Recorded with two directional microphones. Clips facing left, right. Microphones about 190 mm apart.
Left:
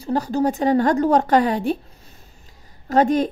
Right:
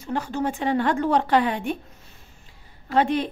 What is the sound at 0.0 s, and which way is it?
A woman's voice, 35° left (ahead or behind).